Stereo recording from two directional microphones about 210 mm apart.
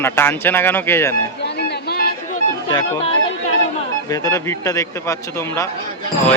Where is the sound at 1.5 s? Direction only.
50° left (ahead or behind).